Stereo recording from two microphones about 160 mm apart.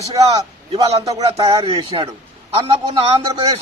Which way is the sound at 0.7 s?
40° right (ahead or behind).